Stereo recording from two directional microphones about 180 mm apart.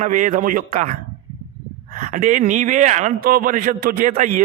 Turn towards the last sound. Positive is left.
turn(degrees=-45)  # may be behind; listen again after turning